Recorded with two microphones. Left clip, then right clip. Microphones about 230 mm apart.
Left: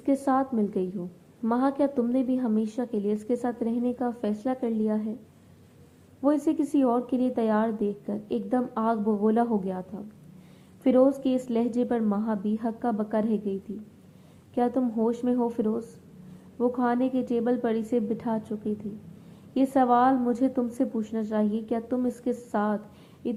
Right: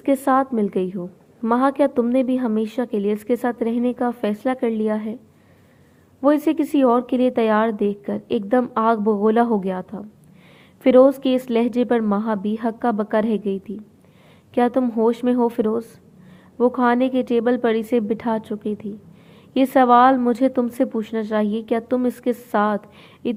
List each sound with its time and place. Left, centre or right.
0.0 s a woman's voice: right
6.2 s a woman's voice: right
23.2 s a sound: right